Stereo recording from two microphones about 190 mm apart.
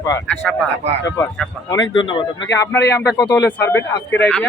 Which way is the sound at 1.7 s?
20° left (ahead or behind).